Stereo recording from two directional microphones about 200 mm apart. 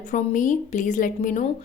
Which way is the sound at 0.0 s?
40° left (ahead or behind).